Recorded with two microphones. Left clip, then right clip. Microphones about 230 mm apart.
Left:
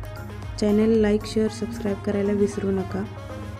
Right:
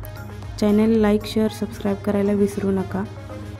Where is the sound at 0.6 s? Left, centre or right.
Centre.